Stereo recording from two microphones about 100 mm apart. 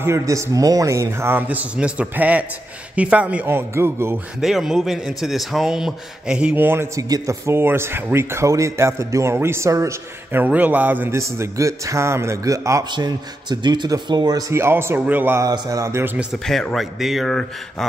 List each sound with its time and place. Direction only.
0.0 s speech: 30° right (ahead or behind)
4.4 s a man's voice: 5° right (ahead or behind)
6.5 s speech: 20° right (ahead or behind)
7.0 s speech: 35° right (ahead or behind)
10.4 s speech: 15° right (ahead or behind); by 12.8 s 30° right (ahead or behind)
12.9 s speech: 50° right (ahead or behind)
14.5 s speech: 25° right (ahead or behind)
15.4 s speech: 35° right (ahead or behind)
16.4 s a man's voice: 5° left (ahead or behind)